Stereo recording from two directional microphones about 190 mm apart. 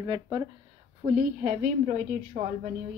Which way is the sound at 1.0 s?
45° right (ahead or behind).